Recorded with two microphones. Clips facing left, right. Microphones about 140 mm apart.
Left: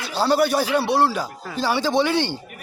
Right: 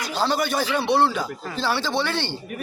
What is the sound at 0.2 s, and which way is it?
A man's voice, 10° left (ahead or behind).